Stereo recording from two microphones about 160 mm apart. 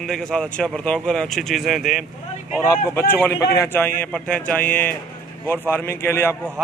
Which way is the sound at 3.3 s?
20° left (ahead or behind).